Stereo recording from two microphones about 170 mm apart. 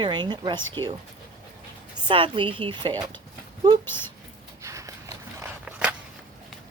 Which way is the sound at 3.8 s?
10° left (ahead or behind).